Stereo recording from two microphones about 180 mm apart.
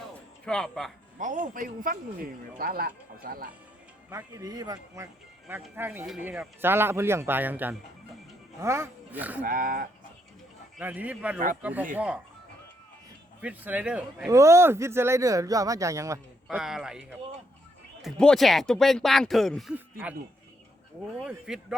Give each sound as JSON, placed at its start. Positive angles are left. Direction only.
{"t": 0.4, "sound": "speech", "side_deg": 5}
{"t": 1.2, "sound": "speech", "side_deg": -45}
{"t": 4.1, "sound": "speech", "side_deg": -15}
{"t": 9.4, "sound": "speech", "side_deg": -50}
{"t": 10.8, "sound": "speech", "side_deg": -10}
{"t": 13.4, "sound": "speech", "side_deg": -10}
{"t": 14.3, "sound": "speech", "side_deg": -15}
{"t": 16.5, "sound": "speech", "side_deg": -5}
{"t": 21.2, "sound": "speech", "side_deg": -5}